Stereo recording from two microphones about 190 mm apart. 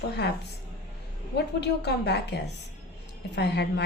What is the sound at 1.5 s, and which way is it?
A woman's voice, 60° left (ahead or behind).